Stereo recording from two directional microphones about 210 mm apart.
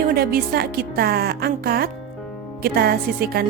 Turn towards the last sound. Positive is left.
turn(degrees=-45)  # may be behind; listen again after turning